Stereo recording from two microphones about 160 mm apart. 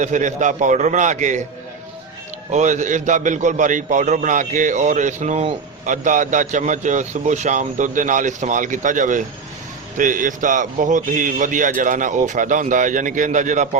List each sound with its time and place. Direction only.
0.0 s a man's voice: 50° right (ahead or behind)
2.5 s a man's voice: 50° right (ahead or behind)